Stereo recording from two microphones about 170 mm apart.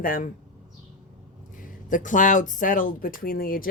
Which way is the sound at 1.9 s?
50° left (ahead or behind).